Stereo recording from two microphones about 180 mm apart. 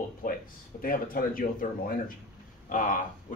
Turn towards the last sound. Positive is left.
turn(degrees=45)  # may be behind; listen again after turning